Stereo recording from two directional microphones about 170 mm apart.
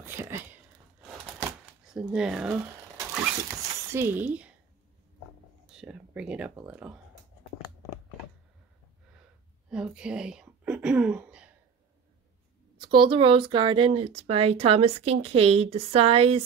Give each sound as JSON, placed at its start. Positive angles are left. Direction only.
{"t": 0.0, "sound": "a sound", "side_deg": -15}
{"t": 1.4, "sound": "a sound", "side_deg": -5}
{"t": 3.9, "sound": "speech", "side_deg": -15}
{"t": 5.8, "sound": "speech", "side_deg": -5}
{"t": 9.7, "sound": "speech", "side_deg": -5}
{"t": 12.8, "sound": "speech", "side_deg": -30}